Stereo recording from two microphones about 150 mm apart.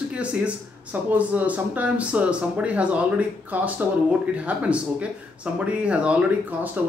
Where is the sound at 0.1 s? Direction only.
10° right (ahead or behind).